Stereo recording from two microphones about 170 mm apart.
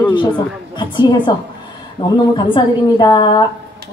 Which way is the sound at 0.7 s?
25° left (ahead or behind).